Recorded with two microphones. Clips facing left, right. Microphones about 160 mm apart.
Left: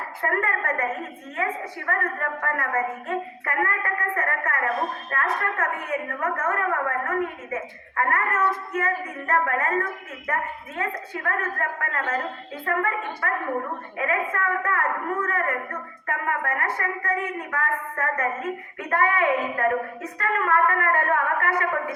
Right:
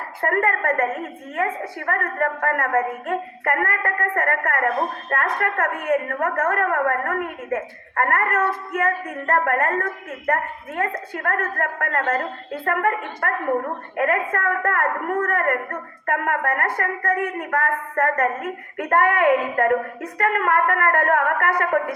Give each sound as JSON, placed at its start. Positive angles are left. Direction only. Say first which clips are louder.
{"t": 0.2, "sound": "a woman's voice", "louder": "right 5 dB", "side_deg": -55}
{"t": 1.9, "sound": "a woman's voice", "louder": "right 4 dB", "side_deg": -55}